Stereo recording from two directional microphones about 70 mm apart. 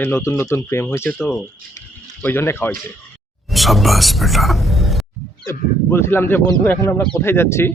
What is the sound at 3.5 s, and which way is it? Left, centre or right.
Speech, centre.